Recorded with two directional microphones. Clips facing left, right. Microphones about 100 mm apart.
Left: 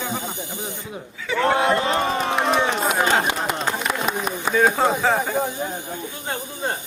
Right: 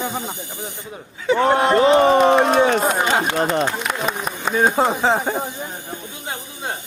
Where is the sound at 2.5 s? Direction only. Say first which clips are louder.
Right 5 dB; 45° right (ahead or behind).